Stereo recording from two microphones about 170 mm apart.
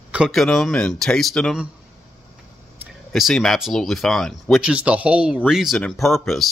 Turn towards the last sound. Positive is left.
turn(degrees=0)  # may be behind; listen again after turning